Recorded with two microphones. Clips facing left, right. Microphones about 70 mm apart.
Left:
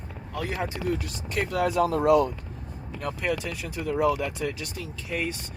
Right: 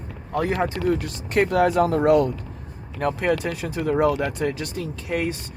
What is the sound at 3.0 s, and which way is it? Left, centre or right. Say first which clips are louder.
Speech: right 7 dB; right.